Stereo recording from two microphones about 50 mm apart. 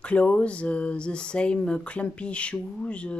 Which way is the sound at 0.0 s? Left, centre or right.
Left.